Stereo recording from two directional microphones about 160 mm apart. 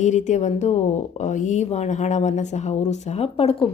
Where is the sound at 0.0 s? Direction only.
50° left (ahead or behind).